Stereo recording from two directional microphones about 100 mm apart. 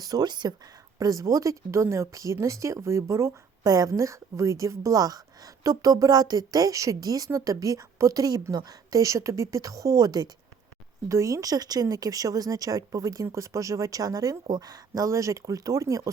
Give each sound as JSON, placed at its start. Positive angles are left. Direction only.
{"t": 0.0, "sound": "speech", "side_deg": -40}